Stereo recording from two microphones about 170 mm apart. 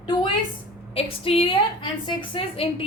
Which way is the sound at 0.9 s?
35° left (ahead or behind).